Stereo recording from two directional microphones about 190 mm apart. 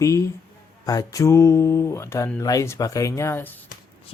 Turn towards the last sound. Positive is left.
turn(degrees=10)  # may be behind; listen again after turning